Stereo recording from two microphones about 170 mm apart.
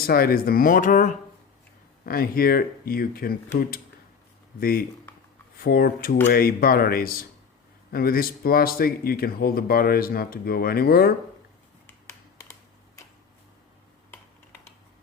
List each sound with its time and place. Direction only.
0.0 s speech: 60° left (ahead or behind)
2.0 s speech: 60° left (ahead or behind)
5.5 s speech: 60° left (ahead or behind)
11.9 s finger snapping: 15° left (ahead or behind)